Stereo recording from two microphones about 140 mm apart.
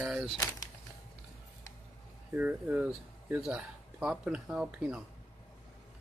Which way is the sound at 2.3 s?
10° right (ahead or behind).